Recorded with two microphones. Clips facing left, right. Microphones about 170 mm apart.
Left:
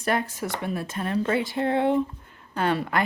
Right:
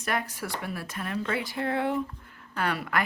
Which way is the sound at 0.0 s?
30° left (ahead or behind).